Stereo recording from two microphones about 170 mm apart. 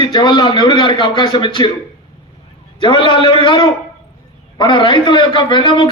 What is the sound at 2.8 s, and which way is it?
A man's voice, 30° left (ahead or behind).